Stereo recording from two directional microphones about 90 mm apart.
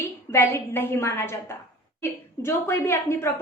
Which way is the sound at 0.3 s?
25° left (ahead or behind).